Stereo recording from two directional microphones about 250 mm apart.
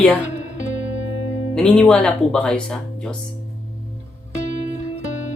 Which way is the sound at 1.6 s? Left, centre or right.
Centre.